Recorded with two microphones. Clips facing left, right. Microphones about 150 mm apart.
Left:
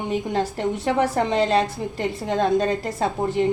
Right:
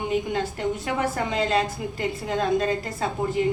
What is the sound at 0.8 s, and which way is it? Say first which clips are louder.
A woman's voice: left 5 dB; 30° left (ahead or behind).